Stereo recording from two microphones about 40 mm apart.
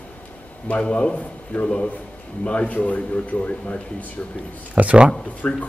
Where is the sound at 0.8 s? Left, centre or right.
Left.